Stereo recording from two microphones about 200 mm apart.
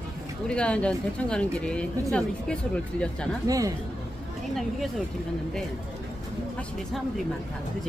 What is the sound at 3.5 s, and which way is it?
Speech, 15° right (ahead or behind).